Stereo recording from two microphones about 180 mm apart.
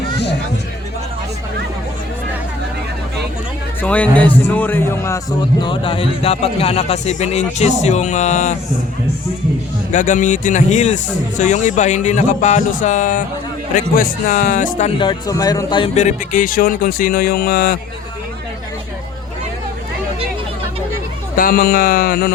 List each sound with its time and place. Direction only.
3.8 s a man's voice: 10° left (ahead or behind)
5.6 s a man's voice: 30° left (ahead or behind)
9.9 s a man's voice: 45° left (ahead or behind); by 15.9 s 25° left (ahead or behind)
16.0 s speech: 40° left (ahead or behind)
21.3 s music: 55° left (ahead or behind)